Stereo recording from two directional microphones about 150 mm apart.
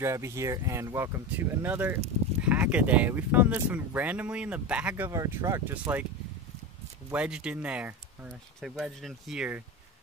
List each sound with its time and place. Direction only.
0.0 s speech: 20° right (ahead or behind)
7.1 s speech: 5° right (ahead or behind)